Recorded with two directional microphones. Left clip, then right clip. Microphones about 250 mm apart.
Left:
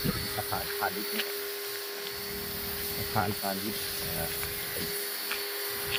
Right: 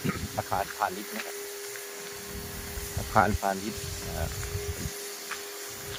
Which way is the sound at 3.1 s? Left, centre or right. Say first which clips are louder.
Right 8 dB; right.